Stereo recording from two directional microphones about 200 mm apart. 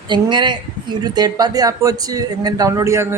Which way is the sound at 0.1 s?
20° right (ahead or behind).